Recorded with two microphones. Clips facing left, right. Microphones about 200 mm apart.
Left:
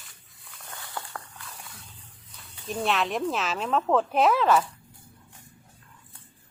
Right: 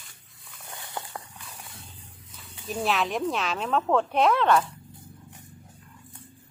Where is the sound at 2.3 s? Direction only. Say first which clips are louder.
Even; centre (ahead or behind).